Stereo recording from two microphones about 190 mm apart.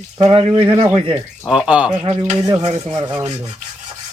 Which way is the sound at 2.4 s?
20° right (ahead or behind).